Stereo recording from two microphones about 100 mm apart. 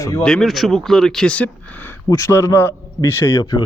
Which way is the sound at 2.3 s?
25° left (ahead or behind).